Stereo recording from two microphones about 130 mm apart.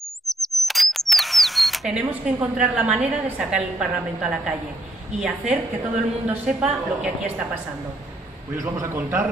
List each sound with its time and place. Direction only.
0.3 s camera: centre (ahead or behind)
2.5 s a woman's voice: 10° right (ahead or behind)
8.5 s a man's voice: 20° right (ahead or behind)